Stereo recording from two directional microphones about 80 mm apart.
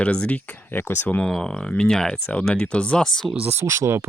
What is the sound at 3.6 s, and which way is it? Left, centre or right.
Speech, right.